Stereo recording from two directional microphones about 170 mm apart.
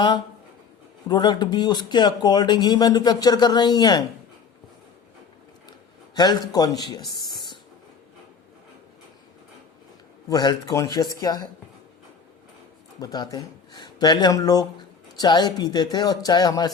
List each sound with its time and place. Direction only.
1.0 s speech: 25° left (ahead or behind)
6.1 s speech: 25° left (ahead or behind)
7.3 s a sound: 25° left (ahead or behind)
10.2 s speech: 25° left (ahead or behind)
13.0 s speech: 20° left (ahead or behind)